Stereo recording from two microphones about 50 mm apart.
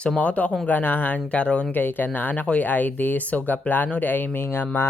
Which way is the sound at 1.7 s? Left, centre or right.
Left.